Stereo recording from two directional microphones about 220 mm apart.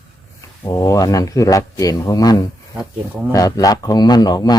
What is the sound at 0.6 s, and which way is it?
A man's voice, 15° left (ahead or behind).